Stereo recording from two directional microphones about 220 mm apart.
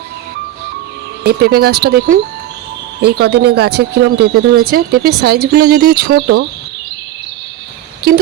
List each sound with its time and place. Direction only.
1.2 s speech: 45° right (ahead or behind)